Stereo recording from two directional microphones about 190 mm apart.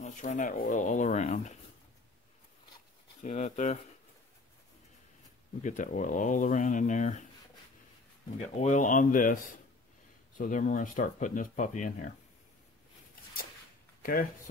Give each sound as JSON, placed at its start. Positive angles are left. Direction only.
{"t": 0.0, "sound": "speech", "side_deg": 40}
{"t": 3.2, "sound": "speech", "side_deg": 40}
{"t": 5.6, "sound": "speech", "side_deg": 40}
{"t": 8.4, "sound": "speech", "side_deg": 40}